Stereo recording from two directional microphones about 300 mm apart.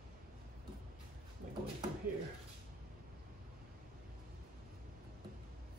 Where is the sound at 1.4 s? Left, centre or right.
Right.